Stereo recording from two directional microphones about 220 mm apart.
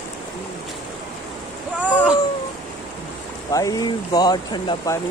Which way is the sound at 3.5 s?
15° left (ahead or behind).